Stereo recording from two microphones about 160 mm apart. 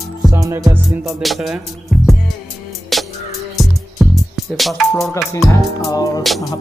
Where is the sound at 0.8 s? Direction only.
Centre (ahead or behind).